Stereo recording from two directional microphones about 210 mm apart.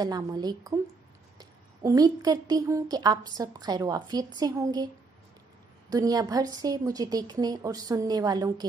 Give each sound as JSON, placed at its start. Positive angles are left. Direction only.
{"t": 0.0, "sound": "a woman's voice", "side_deg": -20}
{"t": 5.9, "sound": "a woman's voice", "side_deg": -15}